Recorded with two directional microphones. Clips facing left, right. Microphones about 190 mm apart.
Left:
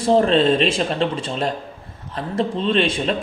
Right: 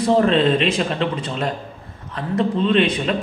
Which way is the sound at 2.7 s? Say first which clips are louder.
Even; 30° left (ahead or behind).